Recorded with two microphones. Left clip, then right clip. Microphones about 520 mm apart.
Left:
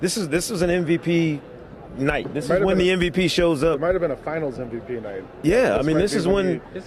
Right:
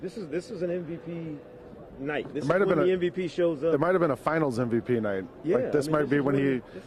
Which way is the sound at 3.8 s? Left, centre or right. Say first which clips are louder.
Left 3 dB; right.